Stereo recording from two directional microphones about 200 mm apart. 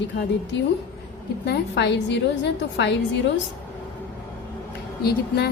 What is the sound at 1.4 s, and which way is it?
Speech, 60° left (ahead or behind).